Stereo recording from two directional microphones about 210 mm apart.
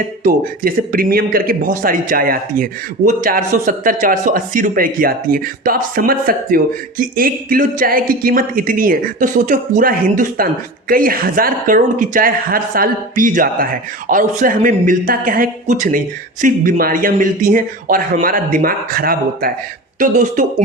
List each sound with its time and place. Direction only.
0.2 s speech: 40° right (ahead or behind)